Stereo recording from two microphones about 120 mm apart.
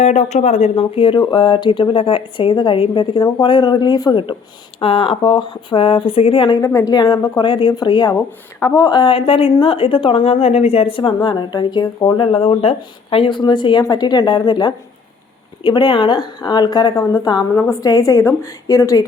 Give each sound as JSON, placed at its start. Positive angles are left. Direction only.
{"t": 0.0, "sound": "speech", "side_deg": 70}
{"t": 0.8, "sound": "a woman's voice", "side_deg": 45}
{"t": 4.8, "sound": "a woman's voice", "side_deg": 45}
{"t": 6.6, "sound": "a woman's voice", "side_deg": 30}
{"t": 12.2, "sound": "a woman's voice", "side_deg": 45}
{"t": 17.5, "sound": "a woman's voice", "side_deg": 25}